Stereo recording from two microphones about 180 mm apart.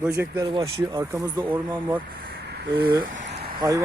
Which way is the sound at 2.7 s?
25° right (ahead or behind).